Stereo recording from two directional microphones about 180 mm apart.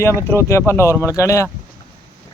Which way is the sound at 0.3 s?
15° left (ahead or behind).